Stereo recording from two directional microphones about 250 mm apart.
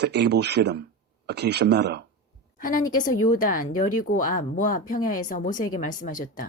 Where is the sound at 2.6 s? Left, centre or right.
Left.